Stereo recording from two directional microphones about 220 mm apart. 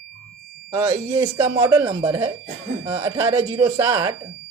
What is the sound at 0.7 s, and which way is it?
Speech, 15° right (ahead or behind).